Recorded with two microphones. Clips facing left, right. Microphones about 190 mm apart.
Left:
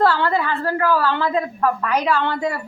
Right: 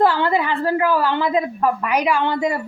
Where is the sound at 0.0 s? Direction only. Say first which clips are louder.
Right 1 dB; 15° right (ahead or behind).